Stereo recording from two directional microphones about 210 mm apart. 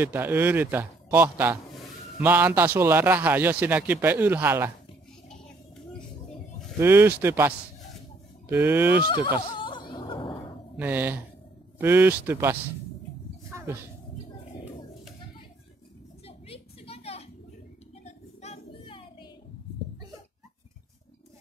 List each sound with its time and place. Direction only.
0.0 s a man's voice: 10° right (ahead or behind)
6.8 s a man's voice: 10° right (ahead or behind)
9.0 s snicker: 25° left (ahead or behind)
10.8 s a man's voice: 10° right (ahead or behind)
13.5 s a sound: 15° right (ahead or behind)
16.3 s a sound: 30° left (ahead or behind)